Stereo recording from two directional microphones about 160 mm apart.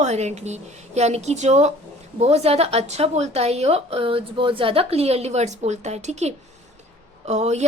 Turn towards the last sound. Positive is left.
turn(degrees=-45)  # may be behind; listen again after turning